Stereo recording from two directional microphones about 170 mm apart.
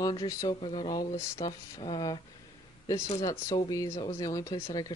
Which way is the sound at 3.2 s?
20° left (ahead or behind).